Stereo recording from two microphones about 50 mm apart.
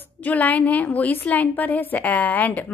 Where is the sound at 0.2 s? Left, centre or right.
Left.